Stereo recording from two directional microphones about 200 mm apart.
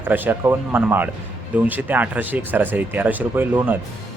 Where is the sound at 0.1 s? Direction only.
10° right (ahead or behind).